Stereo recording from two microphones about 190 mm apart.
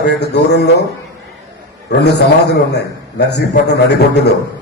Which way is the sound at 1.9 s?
60° left (ahead or behind).